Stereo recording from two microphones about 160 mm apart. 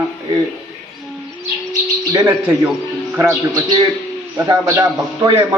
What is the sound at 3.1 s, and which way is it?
Speech, 15° right (ahead or behind).